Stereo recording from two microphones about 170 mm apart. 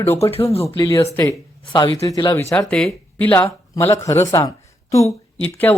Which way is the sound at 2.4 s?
10° left (ahead or behind).